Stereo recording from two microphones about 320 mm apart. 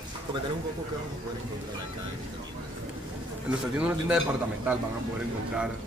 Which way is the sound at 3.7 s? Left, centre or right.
Centre.